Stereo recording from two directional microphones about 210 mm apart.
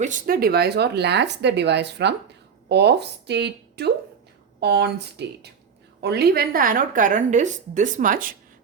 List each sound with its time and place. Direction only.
0.0 s a woman's voice: 40° right (ahead or behind)